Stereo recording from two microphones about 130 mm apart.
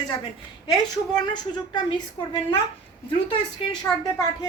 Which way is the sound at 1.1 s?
35° left (ahead or behind).